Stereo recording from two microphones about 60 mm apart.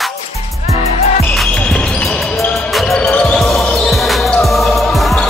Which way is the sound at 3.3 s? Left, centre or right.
Centre.